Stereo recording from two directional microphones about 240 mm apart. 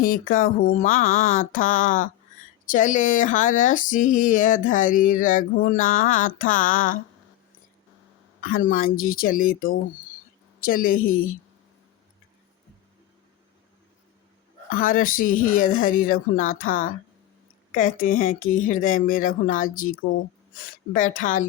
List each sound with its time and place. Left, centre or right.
0.0 s speech: left
8.4 s speech: left
14.7 s speech: left